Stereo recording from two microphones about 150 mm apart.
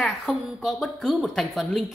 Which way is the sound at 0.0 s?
Centre (ahead or behind).